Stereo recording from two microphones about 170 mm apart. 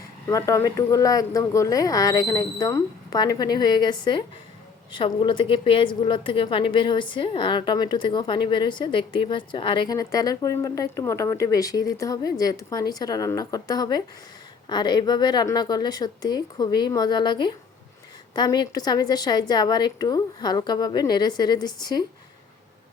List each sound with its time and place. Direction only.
0.3 s a woman's voice: 20° left (ahead or behind)